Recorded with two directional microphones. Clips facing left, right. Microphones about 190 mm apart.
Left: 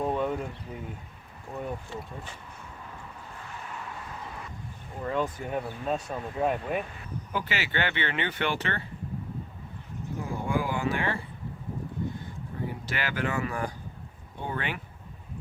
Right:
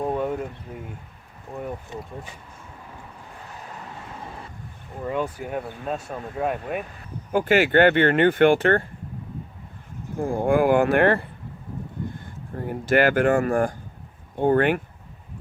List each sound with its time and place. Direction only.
0.0 s a sound: 10° right (ahead or behind)
1.9 s speech: 20° right (ahead or behind)
5.0 s speech: 10° right (ahead or behind)
7.3 s speech: 50° right (ahead or behind)
10.2 s speech: 50° right (ahead or behind)
12.5 s speech: 50° right (ahead or behind)